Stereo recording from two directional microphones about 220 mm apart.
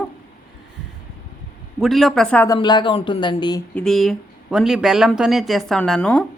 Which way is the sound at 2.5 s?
20° left (ahead or behind).